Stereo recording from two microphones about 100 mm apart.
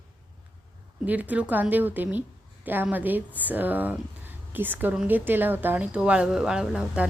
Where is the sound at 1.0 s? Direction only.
15° right (ahead or behind).